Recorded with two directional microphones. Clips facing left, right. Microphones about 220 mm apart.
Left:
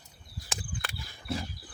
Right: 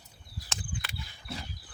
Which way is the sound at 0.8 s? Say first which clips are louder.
Left 1 dB; 50° left (ahead or behind).